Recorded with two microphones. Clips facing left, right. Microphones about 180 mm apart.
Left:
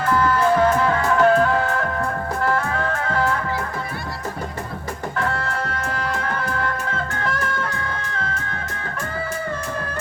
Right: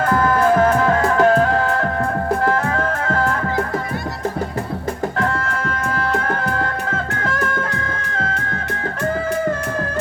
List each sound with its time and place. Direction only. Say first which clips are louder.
0.0 s music: right 3 dB; 50° right (ahead or behind)
5.8 s music: right 4 dB; 55° right (ahead or behind)